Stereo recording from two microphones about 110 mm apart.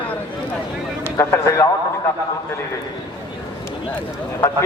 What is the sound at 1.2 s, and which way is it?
Speech, 25° left (ahead or behind).